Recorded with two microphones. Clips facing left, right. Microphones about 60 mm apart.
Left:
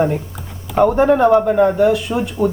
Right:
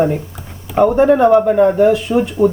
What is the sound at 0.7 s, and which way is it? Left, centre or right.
Speech, centre.